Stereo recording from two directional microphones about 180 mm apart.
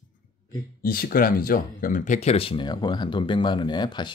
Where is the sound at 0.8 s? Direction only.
55° left (ahead or behind).